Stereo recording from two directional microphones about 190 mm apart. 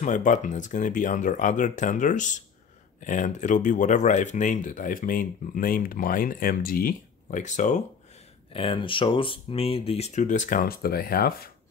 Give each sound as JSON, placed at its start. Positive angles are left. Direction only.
{"t": 0.0, "sound": "speech", "side_deg": 40}
{"t": 8.5, "sound": "speech", "side_deg": 25}